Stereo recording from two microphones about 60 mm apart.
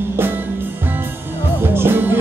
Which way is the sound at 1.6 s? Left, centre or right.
Right.